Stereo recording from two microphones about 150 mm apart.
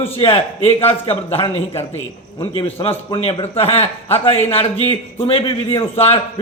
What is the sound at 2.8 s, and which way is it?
Speech, 25° left (ahead or behind).